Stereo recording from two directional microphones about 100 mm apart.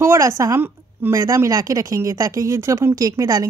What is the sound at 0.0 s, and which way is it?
A woman's voice, 30° right (ahead or behind).